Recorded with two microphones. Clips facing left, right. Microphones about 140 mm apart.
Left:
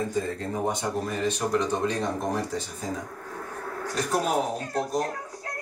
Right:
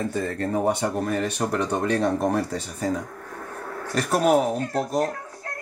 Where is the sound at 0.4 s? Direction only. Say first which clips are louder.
Right 5 dB; 65° right (ahead or behind).